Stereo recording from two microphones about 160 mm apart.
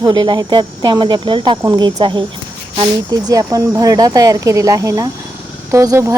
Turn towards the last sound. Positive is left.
turn(degrees=-20)  # may be behind; listen again after turning